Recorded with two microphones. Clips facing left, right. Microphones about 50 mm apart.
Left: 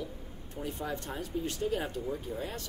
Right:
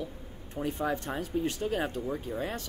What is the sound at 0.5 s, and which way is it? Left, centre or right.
Speech, right.